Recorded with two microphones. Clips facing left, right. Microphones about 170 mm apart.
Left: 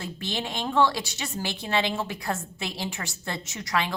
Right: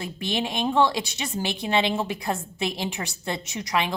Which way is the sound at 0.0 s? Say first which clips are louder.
Right 4 dB; 15° right (ahead or behind).